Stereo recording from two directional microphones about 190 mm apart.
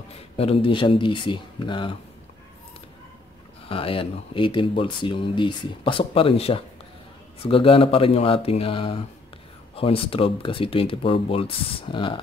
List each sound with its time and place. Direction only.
0.1 s speech: 30° left (ahead or behind)
3.6 s speech: 30° left (ahead or behind)